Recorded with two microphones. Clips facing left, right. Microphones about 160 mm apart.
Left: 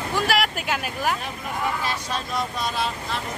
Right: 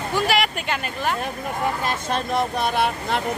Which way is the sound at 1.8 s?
55° right (ahead or behind).